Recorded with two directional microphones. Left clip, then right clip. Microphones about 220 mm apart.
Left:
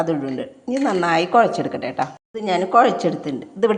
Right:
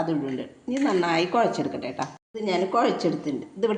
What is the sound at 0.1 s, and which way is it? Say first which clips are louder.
A woman's voice: left 5 dB; 25° left (ahead or behind).